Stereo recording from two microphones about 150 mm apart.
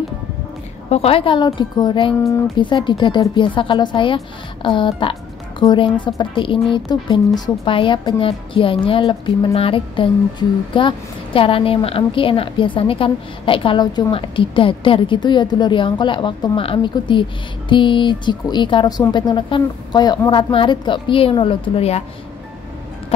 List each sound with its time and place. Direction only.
0.8 s a woman's voice: 40° left (ahead or behind)